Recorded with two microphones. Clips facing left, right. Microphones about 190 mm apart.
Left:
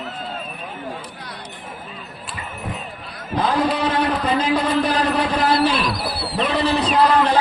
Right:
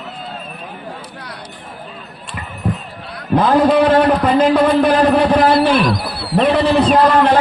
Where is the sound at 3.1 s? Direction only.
55° right (ahead or behind).